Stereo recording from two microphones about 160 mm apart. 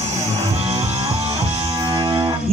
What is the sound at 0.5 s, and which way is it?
Music, 40° right (ahead or behind).